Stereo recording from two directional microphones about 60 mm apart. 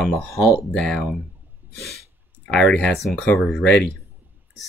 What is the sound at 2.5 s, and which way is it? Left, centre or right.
Speech, centre.